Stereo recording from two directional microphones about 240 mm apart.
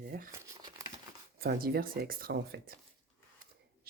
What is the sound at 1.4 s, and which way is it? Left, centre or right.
Speech, right.